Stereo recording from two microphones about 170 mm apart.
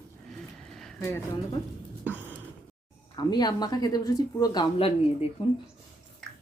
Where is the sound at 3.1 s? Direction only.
25° left (ahead or behind).